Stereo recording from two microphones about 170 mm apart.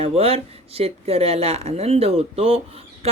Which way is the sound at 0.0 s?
35° right (ahead or behind).